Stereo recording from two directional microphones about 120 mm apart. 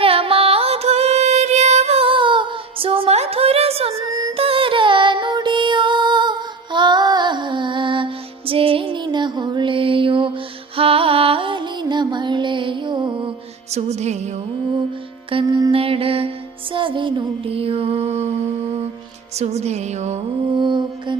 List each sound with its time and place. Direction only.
0.0 s music: 50° right (ahead or behind)
4.1 s music: 30° right (ahead or behind)
4.4 s music: 50° right (ahead or behind)
13.7 s music: 65° right (ahead or behind)
15.4 s mantra: 35° right (ahead or behind)
15.7 s mantra: 50° right (ahead or behind)
16.7 s music: 45° right (ahead or behind)
19.4 s a sound: 65° right (ahead or behind)
20.6 s music: 40° right (ahead or behind)